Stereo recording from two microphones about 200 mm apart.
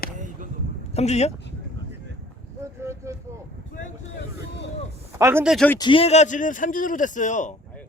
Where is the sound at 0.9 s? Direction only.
35° left (ahead or behind).